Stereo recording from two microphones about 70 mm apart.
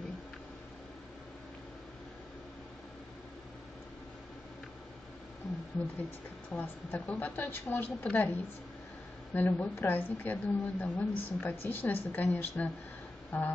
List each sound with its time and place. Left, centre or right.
6.5 s speech: left